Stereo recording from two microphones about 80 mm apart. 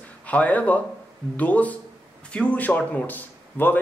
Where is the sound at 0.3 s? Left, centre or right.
Centre.